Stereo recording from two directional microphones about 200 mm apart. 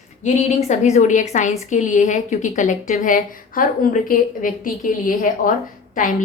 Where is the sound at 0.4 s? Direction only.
35° left (ahead or behind).